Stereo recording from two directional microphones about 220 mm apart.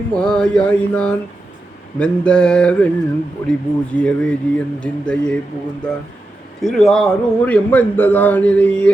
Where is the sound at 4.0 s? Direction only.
5° left (ahead or behind).